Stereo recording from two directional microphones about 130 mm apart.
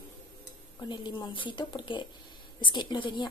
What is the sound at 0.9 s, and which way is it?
A woman's voice, 35° left (ahead or behind).